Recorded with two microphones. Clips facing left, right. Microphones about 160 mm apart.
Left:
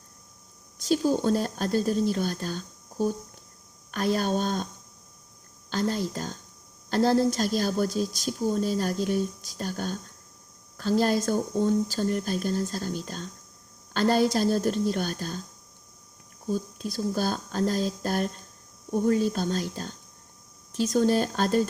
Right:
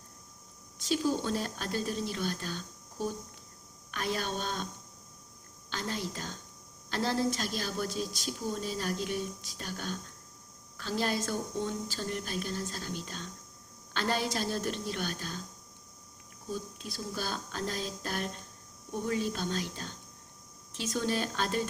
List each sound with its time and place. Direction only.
0.8 s speech: 40° left (ahead or behind)
5.7 s speech: 40° left (ahead or behind)
16.5 s speech: 40° left (ahead or behind)